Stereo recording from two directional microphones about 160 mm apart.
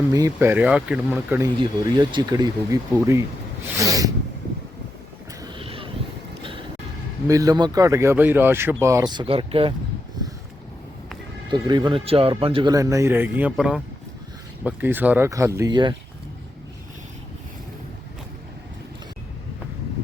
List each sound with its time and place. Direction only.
0.1 s speech: 20° right (ahead or behind)
0.3 s speech: 10° right (ahead or behind)
1.5 s speech: 30° right (ahead or behind)
5.5 s vehicle: 35° right (ahead or behind)
7.3 s speech: 20° right (ahead or behind)
11.5 s speech: 30° right (ahead or behind)
12.7 s speech: 20° right (ahead or behind)